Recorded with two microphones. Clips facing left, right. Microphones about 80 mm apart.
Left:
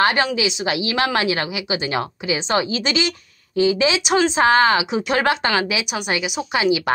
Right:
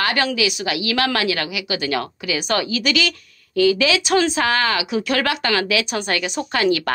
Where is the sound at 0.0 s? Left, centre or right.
Left.